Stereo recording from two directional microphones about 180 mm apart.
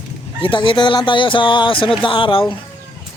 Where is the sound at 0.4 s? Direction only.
30° left (ahead or behind).